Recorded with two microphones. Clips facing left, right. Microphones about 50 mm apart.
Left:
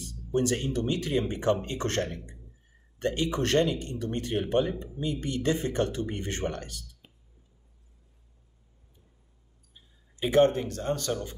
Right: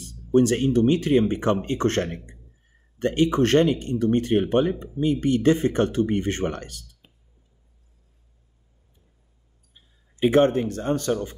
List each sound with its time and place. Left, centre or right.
0.0 s speech: right
10.1 s speech: right